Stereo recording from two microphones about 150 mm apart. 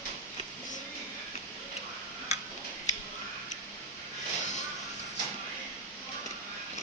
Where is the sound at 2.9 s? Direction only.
50° left (ahead or behind).